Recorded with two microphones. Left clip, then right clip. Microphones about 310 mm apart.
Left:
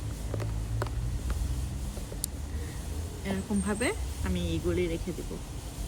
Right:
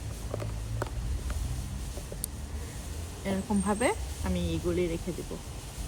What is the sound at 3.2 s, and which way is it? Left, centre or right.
Speech, centre.